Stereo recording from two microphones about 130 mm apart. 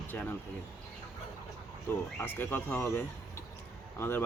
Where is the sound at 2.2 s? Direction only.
15° left (ahead or behind).